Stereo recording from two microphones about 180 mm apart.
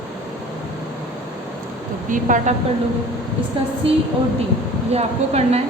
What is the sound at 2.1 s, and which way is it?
Speech, 45° right (ahead or behind).